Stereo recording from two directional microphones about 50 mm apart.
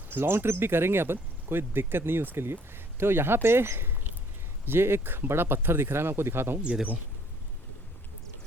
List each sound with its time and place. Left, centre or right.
0.1 s speech: right